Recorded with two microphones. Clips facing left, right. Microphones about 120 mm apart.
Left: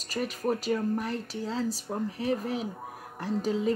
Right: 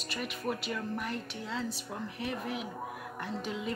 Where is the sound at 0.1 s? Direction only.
40° left (ahead or behind).